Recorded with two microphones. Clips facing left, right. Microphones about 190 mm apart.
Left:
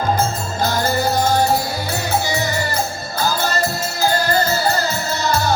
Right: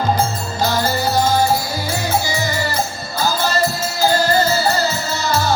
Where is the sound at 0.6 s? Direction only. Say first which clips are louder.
Even; 55° left (ahead or behind).